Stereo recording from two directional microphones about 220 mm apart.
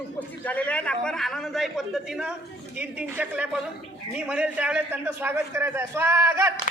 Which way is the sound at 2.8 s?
5° right (ahead or behind).